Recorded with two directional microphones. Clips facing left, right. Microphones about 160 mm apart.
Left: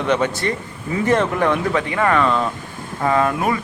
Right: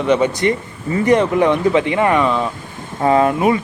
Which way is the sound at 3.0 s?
25° right (ahead or behind).